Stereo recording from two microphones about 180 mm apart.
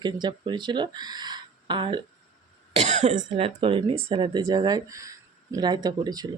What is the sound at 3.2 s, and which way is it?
Speech, 35° right (ahead or behind).